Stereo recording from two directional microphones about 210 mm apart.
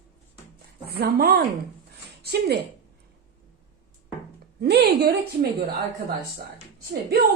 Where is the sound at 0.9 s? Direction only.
50° right (ahead or behind).